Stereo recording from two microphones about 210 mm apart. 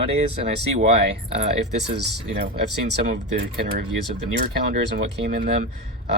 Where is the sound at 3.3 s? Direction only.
50° right (ahead or behind).